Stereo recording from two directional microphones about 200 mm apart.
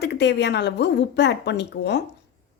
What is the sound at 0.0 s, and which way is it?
A woman's voice, 60° left (ahead or behind).